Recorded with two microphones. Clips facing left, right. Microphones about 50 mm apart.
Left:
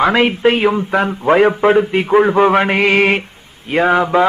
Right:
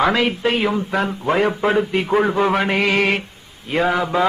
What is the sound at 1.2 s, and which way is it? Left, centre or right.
Speech, left.